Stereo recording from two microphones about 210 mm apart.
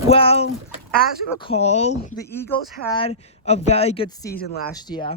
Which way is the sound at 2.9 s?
25° left (ahead or behind).